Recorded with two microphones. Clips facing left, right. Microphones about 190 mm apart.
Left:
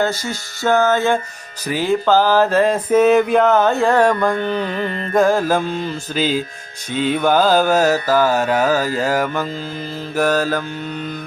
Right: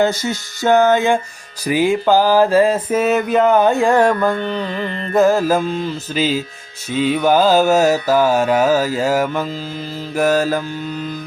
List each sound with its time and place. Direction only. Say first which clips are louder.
0.0 s mantra: right 3 dB; 20° right (ahead or behind)